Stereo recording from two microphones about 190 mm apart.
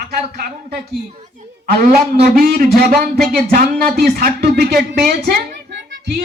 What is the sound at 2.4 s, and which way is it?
Speech, 50° right (ahead or behind).